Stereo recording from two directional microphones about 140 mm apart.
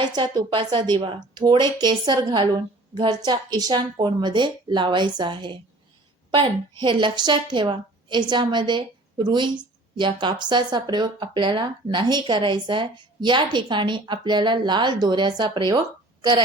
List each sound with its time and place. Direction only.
0.0 s a woman's voice: 30° right (ahead or behind)